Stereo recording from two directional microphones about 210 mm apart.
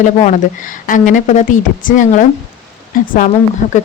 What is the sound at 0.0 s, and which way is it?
Speech, 35° left (ahead or behind).